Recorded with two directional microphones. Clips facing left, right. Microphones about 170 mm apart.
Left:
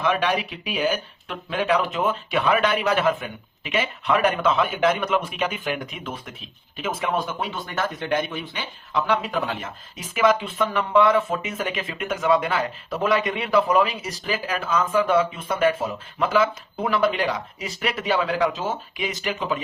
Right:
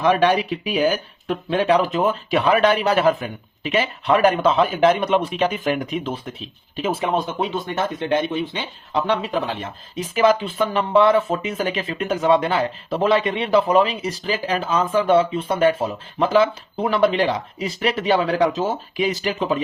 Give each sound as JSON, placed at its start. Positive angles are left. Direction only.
{"t": 0.0, "sound": "speech", "side_deg": -40}